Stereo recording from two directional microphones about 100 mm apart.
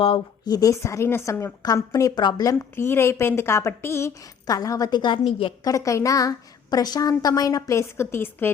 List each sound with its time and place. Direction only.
0.4 s a woman's voice: 40° left (ahead or behind)
5.6 s a woman's voice: 35° left (ahead or behind)